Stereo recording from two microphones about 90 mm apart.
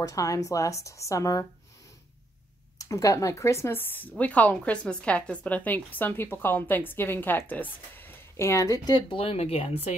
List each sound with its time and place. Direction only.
0.0 s speech: 40° left (ahead or behind)
2.8 s a woman's voice: 35° left (ahead or behind)
9.1 s speech: 90° left